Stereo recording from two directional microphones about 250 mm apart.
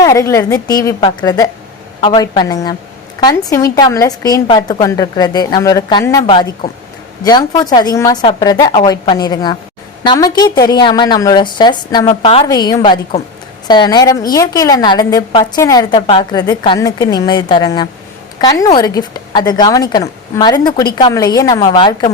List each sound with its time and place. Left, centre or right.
0.0 s a woman's voice: centre